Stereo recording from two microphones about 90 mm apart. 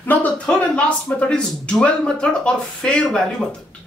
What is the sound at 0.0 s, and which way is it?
A man's voice, 20° left (ahead or behind).